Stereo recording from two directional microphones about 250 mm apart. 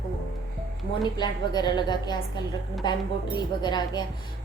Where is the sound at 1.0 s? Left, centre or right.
Centre.